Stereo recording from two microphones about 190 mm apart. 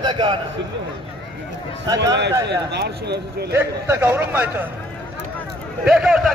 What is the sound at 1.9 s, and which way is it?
Speech, 20° right (ahead or behind).